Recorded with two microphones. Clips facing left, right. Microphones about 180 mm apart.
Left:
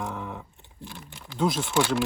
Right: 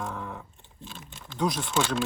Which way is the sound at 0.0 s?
15° left (ahead or behind).